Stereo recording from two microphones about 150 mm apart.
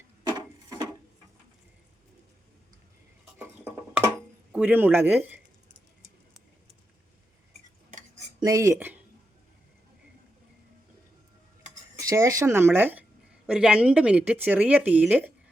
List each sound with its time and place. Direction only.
0.3 s wood: 25° right (ahead or behind)
4.5 s speech: 10° right (ahead or behind)
8.4 s speech: 20° right (ahead or behind)
11.9 s speech: 20° right (ahead or behind)